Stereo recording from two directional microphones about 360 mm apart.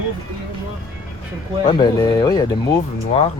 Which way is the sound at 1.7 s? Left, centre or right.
Centre.